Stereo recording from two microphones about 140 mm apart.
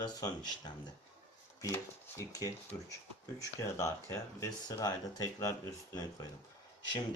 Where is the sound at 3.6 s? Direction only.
20° left (ahead or behind).